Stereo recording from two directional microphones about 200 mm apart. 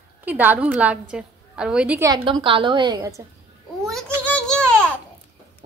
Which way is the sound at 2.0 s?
25° right (ahead or behind).